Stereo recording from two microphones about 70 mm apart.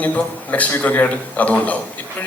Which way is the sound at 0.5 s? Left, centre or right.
Left.